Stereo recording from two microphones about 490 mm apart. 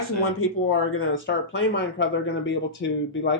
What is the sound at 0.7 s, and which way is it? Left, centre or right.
Speech, left.